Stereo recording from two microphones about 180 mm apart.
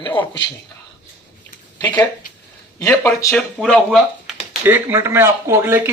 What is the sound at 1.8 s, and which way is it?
Speech, 10° left (ahead or behind).